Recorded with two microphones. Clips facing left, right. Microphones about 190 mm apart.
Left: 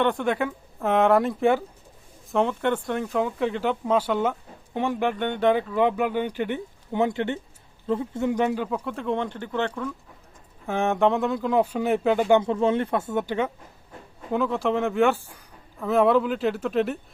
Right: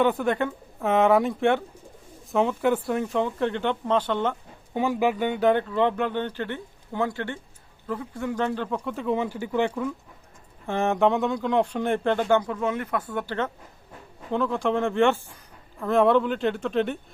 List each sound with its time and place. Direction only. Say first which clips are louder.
0.0 s speech: right 1 dB; 5° right (ahead or behind)
12.3 s speech: left 3 dB; 25° left (ahead or behind)
14.3 s speech: left 1 dB; 5° left (ahead or behind)